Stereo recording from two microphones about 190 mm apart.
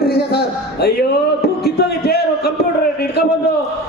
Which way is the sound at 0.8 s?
55° left (ahead or behind).